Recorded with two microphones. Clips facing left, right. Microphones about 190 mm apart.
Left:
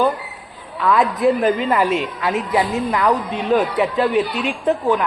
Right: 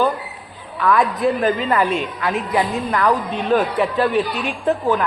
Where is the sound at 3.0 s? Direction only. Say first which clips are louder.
Even; centre (ahead or behind).